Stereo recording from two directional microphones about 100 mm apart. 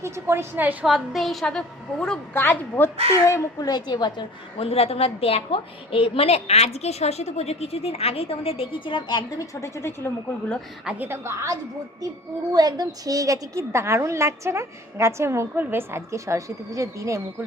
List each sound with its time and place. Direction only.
0.0 s a woman's voice: 25° right (ahead or behind)
0.9 s a woman's voice: centre (ahead or behind)
2.3 s a woman's voice: 20° left (ahead or behind)
3.7 s a woman's voice: 45° left (ahead or behind)
4.5 s a woman's voice: 80° left; by 9.2 s 50° left (ahead or behind)
9.4 s a woman's voice: 30° left (ahead or behind)
10.8 s a woman's voice: 15° right (ahead or behind)
12.5 s a woman's voice: 40° right (ahead or behind)